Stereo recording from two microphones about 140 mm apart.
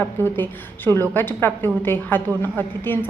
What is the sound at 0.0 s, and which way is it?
A woman's voice, 15° left (ahead or behind).